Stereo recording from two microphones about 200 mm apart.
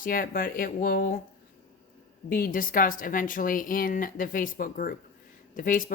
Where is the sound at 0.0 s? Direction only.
45° left (ahead or behind).